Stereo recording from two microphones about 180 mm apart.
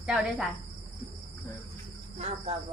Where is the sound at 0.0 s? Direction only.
5° right (ahead or behind).